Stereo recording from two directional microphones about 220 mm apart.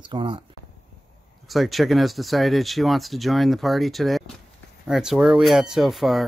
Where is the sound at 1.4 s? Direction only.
Centre (ahead or behind).